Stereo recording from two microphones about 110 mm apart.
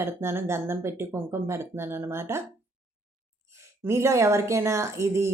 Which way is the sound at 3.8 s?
25° right (ahead or behind).